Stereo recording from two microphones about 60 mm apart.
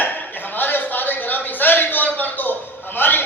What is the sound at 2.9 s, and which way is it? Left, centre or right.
Music, left.